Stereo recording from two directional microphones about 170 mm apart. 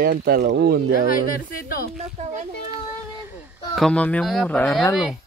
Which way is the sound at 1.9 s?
40° right (ahead or behind).